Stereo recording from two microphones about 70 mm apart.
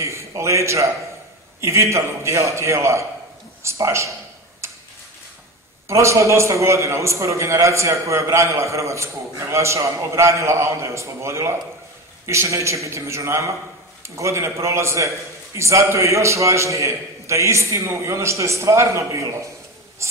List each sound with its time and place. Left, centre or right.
0.0 s a man's voice: right
5.9 s a man's voice: right
20.0 s a sound: right